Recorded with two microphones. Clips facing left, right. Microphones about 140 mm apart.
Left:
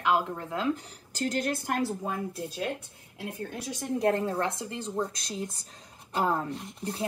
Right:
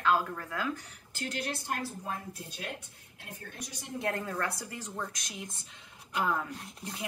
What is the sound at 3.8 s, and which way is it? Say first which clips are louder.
Speech: left 8 dB; 35° left (ahead or behind).